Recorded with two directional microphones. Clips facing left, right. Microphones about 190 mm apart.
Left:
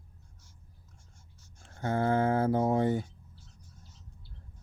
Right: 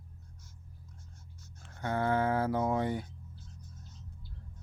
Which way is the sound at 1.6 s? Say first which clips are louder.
Left 3 dB; 30° left (ahead or behind).